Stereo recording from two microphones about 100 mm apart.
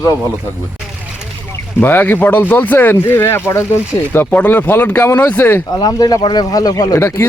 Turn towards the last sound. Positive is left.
turn(degrees=25)  # may be behind; listen again after turning